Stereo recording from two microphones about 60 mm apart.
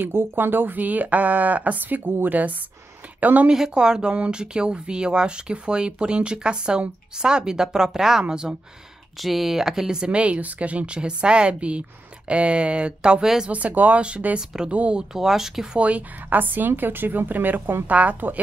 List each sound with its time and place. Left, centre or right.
0.0 s a woman's voice: right
3.4 s speech: centre
13.5 s speech: right
15.1 s speech: centre
15.8 s a woman's voice: right